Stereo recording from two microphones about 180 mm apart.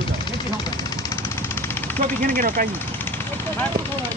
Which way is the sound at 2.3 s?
50° right (ahead or behind).